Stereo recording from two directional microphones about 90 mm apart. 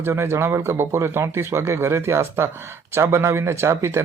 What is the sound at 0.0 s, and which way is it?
Speech, 30° right (ahead or behind).